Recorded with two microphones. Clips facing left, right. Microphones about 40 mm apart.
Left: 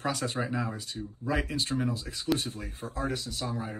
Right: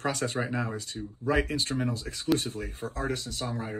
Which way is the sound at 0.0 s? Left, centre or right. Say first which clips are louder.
Right 1 dB; right.